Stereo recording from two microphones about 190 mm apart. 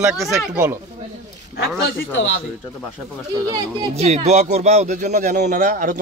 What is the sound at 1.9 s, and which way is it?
Speech, 55° left (ahead or behind).